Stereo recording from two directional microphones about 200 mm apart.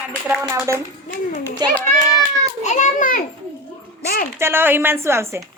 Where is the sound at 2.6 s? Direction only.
35° left (ahead or behind).